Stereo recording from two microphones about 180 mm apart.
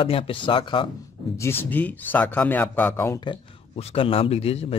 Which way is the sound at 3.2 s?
30° left (ahead or behind).